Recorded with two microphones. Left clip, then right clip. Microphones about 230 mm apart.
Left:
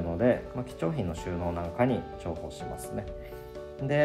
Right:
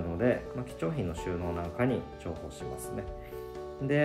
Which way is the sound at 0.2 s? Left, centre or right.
Centre.